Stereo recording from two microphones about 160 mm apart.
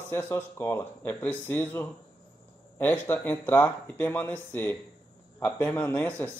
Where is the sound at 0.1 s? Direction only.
15° left (ahead or behind).